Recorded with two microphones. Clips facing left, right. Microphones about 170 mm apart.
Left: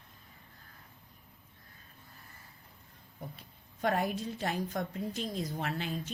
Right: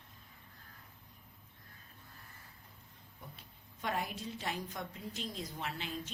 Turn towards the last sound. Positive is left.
turn(degrees=50)  # may be behind; listen again after turning